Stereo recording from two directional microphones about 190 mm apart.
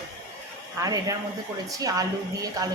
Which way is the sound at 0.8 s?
20° right (ahead or behind).